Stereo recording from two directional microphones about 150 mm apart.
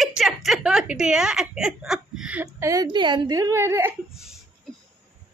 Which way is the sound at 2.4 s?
20° right (ahead or behind).